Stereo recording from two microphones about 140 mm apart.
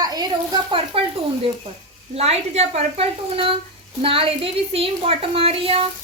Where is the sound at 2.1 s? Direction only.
45° right (ahead or behind).